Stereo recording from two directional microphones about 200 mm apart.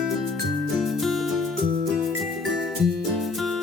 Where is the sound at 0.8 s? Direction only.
Centre (ahead or behind).